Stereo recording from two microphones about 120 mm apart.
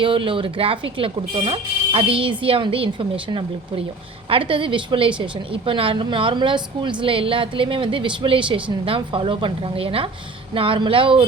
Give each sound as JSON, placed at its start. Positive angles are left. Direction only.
{"t": 0.0, "sound": "a woman's voice", "side_deg": -45}